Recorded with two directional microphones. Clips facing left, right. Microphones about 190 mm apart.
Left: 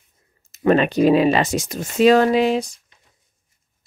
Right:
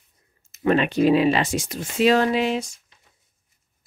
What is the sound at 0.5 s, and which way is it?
Speech, 40° left (ahead or behind).